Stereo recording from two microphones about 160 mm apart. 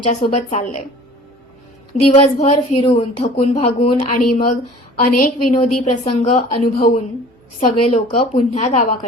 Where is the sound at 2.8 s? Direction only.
35° left (ahead or behind).